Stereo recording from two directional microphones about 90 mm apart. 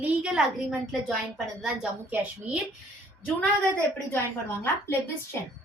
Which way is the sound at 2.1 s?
15° right (ahead or behind).